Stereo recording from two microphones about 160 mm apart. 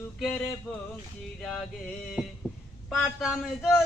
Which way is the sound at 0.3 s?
10° left (ahead or behind).